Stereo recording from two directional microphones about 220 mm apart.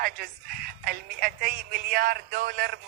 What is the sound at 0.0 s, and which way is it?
Speech, 40° right (ahead or behind).